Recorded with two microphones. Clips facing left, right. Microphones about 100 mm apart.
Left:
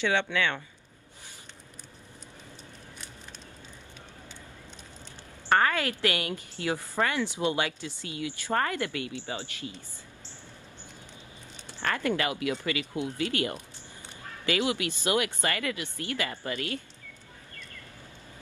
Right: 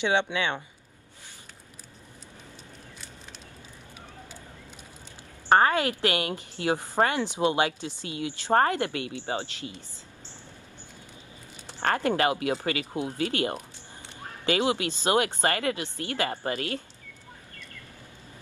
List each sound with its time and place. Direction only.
0.0 s speech: 20° right (ahead or behind)
5.5 s speech: 25° right (ahead or behind)
11.8 s speech: 35° right (ahead or behind)